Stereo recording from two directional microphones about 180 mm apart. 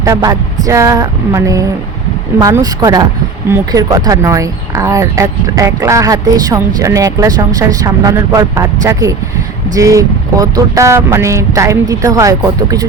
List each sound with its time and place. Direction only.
0.0 s speech: 20° right (ahead or behind)